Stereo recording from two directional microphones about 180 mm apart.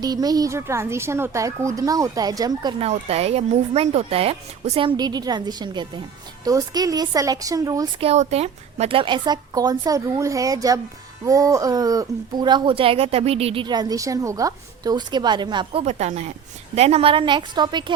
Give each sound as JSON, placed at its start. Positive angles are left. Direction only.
{"t": 0.0, "sound": "speech", "side_deg": -20}
{"t": 2.8, "sound": "speech", "side_deg": -35}
{"t": 4.9, "sound": "speech", "side_deg": -20}
{"t": 8.0, "sound": "speech", "side_deg": -35}
{"t": 15.8, "sound": "speech", "side_deg": -40}